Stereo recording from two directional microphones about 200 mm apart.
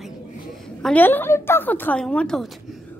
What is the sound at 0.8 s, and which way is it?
A woman's voice, 10° left (ahead or behind).